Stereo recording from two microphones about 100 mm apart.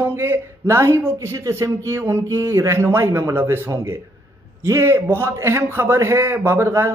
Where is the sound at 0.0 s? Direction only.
25° right (ahead or behind).